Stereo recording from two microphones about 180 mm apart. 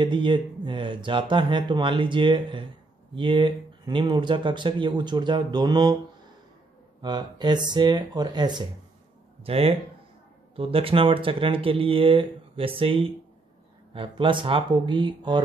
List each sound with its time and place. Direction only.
0.0 s speech: 25° right (ahead or behind)
7.0 s speech: 25° right (ahead or behind)